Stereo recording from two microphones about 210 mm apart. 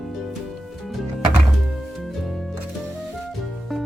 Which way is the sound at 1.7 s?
Centre (ahead or behind).